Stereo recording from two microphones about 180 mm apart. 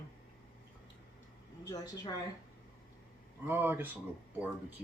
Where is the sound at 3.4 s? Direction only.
10° right (ahead or behind).